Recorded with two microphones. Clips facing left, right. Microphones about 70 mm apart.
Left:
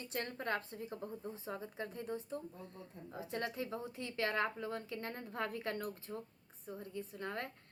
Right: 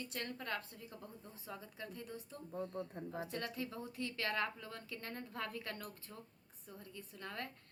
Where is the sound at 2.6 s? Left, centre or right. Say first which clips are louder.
Right 9 dB; right.